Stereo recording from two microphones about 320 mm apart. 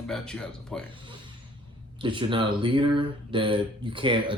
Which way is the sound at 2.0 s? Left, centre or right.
Centre.